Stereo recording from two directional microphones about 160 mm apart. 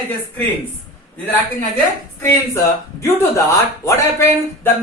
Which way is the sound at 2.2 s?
15° left (ahead or behind).